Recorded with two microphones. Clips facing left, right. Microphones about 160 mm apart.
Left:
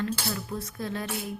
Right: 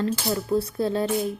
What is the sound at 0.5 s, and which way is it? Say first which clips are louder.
Speech: right 10 dB; 30° right (ahead or behind).